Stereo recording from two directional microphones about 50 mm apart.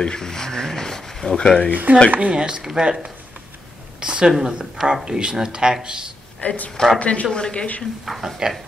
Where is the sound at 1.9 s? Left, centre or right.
Right.